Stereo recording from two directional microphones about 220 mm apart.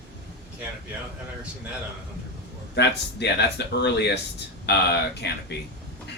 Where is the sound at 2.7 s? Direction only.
50° left (ahead or behind).